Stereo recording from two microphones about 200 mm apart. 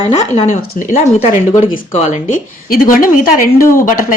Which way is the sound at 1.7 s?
40° left (ahead or behind).